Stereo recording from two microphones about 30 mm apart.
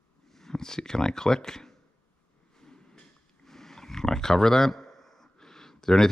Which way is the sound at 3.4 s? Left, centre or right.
Centre.